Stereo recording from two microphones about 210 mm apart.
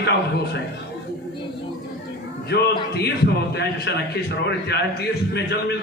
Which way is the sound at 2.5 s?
50° left (ahead or behind).